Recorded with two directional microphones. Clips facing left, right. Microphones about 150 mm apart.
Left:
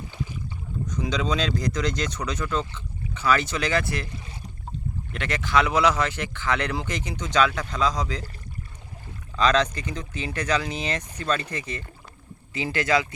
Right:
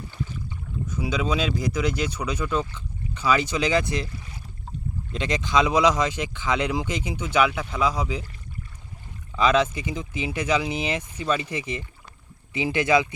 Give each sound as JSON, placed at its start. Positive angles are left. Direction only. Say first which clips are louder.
{"t": 0.9, "sound": "speech", "louder": "right 1 dB", "side_deg": -5}
{"t": 5.1, "sound": "speech", "louder": "right 1 dB", "side_deg": -20}
{"t": 9.3, "sound": "speech", "louder": "right 1 dB", "side_deg": -10}